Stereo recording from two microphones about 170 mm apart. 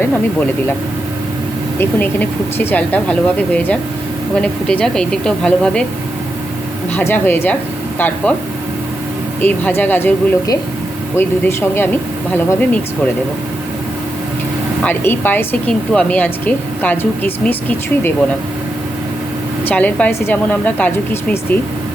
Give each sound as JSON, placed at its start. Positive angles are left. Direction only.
{"t": 1.8, "sound": "speech", "side_deg": 10}
{"t": 6.9, "sound": "speech", "side_deg": 10}
{"t": 9.4, "sound": "speech", "side_deg": 10}
{"t": 14.8, "sound": "speech", "side_deg": 10}
{"t": 19.6, "sound": "speech", "side_deg": 10}